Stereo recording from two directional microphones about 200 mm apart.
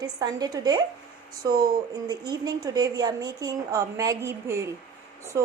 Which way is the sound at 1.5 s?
50° right (ahead or behind).